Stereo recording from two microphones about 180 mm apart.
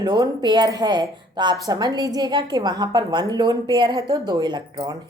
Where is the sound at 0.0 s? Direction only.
25° right (ahead or behind).